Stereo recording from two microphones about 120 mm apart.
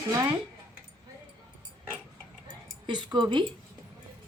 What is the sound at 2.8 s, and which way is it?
Speech, 40° right (ahead or behind).